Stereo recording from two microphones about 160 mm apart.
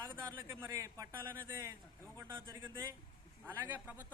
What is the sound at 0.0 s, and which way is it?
A man's voice, 20° right (ahead or behind).